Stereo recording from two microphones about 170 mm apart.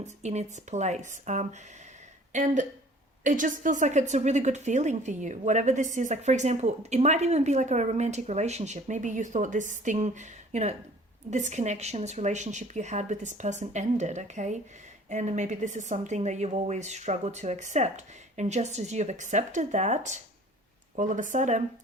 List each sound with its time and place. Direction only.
0.0 s a woman's voice: 40° right (ahead or behind)